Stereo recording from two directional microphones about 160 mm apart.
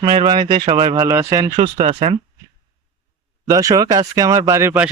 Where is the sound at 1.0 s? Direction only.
20° right (ahead or behind).